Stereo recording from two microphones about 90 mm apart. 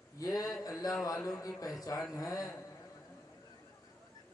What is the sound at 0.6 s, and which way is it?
A man's voice, 40° left (ahead or behind).